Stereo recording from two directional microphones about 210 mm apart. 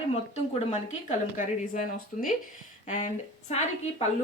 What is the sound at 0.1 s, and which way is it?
Speech, 30° left (ahead or behind).